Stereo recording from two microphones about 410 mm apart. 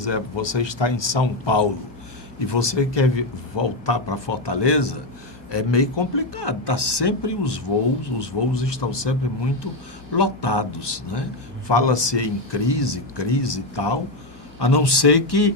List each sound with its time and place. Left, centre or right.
0.0 s a man's voice: left
5.5 s a man's voice: left
11.7 s a man's voice: left
14.6 s speech: left